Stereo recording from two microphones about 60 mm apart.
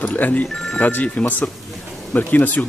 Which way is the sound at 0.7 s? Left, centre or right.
Left.